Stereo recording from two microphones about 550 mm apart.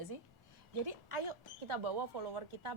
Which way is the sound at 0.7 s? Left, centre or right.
Right.